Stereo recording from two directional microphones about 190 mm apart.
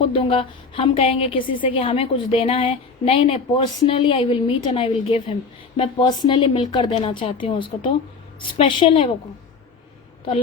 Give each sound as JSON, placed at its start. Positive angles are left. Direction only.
{"t": 0.0, "sound": "a woman's voice", "side_deg": 30}